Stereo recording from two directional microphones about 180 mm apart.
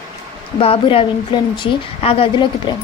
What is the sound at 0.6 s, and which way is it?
Speech, 30° left (ahead or behind).